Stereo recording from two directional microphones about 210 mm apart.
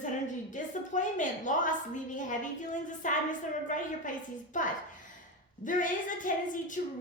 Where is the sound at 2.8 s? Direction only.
35° left (ahead or behind).